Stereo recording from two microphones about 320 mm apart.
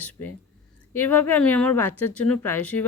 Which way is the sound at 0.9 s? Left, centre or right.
Centre.